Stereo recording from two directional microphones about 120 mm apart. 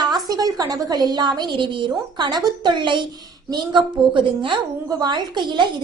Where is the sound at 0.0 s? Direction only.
35° right (ahead or behind).